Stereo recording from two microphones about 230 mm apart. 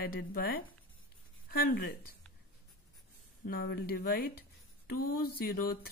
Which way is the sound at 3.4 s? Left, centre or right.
Left.